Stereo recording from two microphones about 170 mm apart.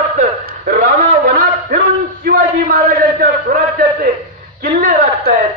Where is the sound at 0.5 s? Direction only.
65° right (ahead or behind).